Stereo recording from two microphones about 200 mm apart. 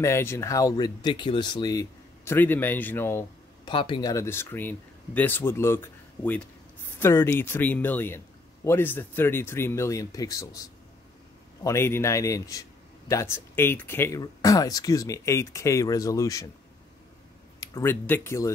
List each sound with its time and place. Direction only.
0.0 s speech: 15° left (ahead or behind)
3.7 s speech: 25° left (ahead or behind)
4.1 s speech: 15° left (ahead or behind)
17.6 s speech: 15° left (ahead or behind)